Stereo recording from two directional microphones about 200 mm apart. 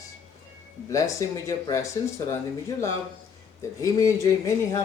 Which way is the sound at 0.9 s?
15° left (ahead or behind).